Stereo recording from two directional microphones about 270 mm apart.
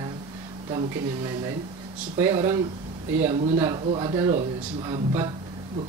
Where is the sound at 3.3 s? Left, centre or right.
Right.